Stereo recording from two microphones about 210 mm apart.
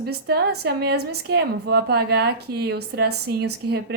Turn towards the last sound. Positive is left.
turn(degrees=-50)  # may be behind; listen again after turning